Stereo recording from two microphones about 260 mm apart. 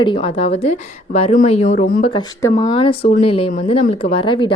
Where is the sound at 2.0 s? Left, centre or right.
Centre.